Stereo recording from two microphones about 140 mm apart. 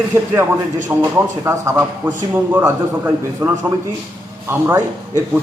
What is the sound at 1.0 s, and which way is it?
A man's voice, 20° right (ahead or behind).